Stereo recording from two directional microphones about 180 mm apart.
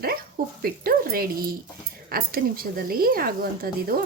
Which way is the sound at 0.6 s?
55° right (ahead or behind).